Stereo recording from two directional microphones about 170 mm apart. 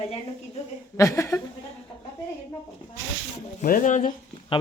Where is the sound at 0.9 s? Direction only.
15° left (ahead or behind).